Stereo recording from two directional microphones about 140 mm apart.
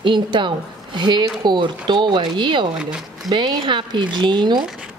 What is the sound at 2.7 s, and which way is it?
Speech, 5° right (ahead or behind).